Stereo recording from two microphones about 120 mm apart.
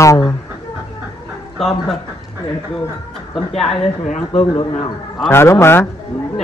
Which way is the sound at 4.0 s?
60° left (ahead or behind).